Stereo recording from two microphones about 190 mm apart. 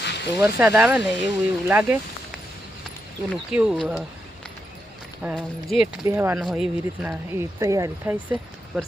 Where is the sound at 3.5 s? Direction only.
5° right (ahead or behind).